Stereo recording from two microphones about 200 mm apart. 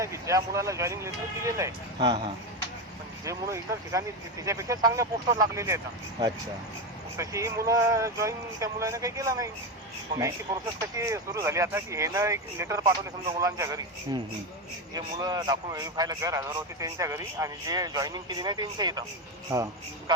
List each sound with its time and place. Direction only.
0.0 s speech: 15° right (ahead or behind)
3.2 s speech: 15° right (ahead or behind)